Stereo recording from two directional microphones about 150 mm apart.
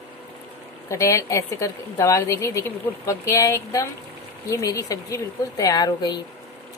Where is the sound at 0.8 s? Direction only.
20° left (ahead or behind).